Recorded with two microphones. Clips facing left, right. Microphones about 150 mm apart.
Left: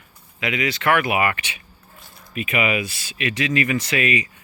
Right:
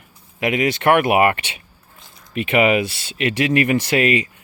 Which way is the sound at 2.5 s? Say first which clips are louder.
Right 7 dB; 60° right (ahead or behind).